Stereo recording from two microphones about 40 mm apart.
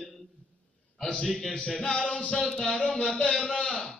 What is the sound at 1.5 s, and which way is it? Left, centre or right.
Music, left.